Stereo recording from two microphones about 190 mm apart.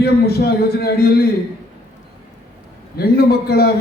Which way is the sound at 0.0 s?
55° left (ahead or behind).